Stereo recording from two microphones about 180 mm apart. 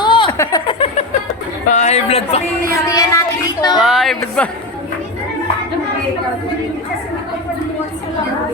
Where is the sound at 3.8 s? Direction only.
Centre (ahead or behind).